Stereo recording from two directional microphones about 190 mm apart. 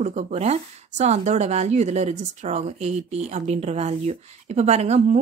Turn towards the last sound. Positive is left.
turn(degrees=-35)  # may be behind; listen again after turning